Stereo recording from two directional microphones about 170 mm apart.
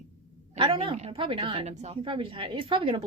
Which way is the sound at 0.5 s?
30° right (ahead or behind).